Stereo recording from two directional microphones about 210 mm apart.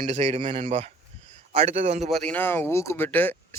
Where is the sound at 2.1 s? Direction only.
5° left (ahead or behind).